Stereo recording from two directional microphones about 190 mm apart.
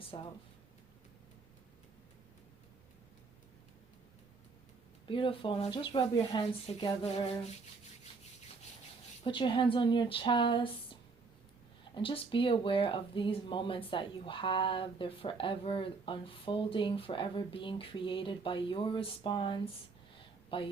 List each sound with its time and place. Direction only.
0.1 s speech: 25° left (ahead or behind)
5.0 s speech: 25° left (ahead or behind)
9.2 s speech: 25° left (ahead or behind)
11.9 s speech: 25° left (ahead or behind)